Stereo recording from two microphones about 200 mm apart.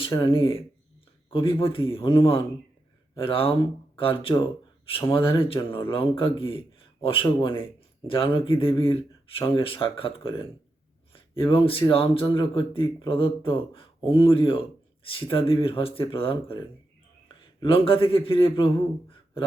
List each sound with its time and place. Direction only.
0.0 s speech: 20° left (ahead or behind)